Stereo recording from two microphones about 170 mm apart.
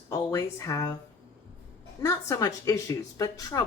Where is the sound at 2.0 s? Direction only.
20° left (ahead or behind).